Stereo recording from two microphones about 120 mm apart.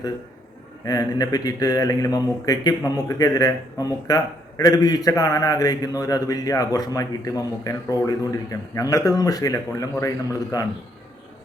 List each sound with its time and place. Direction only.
0.9 s a man's voice: 30° left (ahead or behind)